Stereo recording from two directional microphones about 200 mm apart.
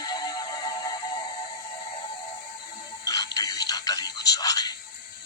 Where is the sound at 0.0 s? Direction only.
20° left (ahead or behind).